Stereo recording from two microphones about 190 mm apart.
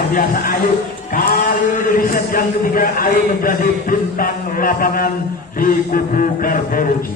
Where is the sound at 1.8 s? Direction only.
50° left (ahead or behind).